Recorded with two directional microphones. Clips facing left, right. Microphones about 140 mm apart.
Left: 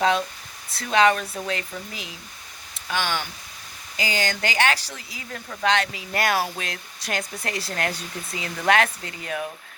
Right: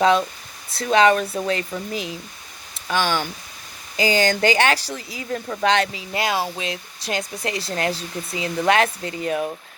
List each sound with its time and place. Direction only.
0.8 s speech: 30° right (ahead or behind)
3.9 s speech: 30° right (ahead or behind)